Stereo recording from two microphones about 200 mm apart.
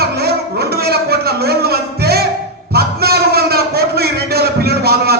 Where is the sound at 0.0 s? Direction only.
50° right (ahead or behind).